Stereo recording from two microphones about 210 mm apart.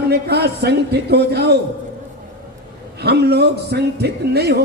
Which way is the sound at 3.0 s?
50° right (ahead or behind).